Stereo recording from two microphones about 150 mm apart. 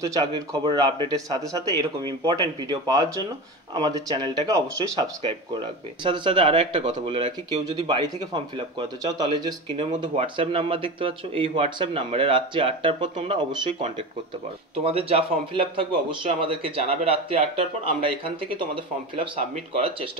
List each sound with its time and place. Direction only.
0.0 s speech: 25° right (ahead or behind)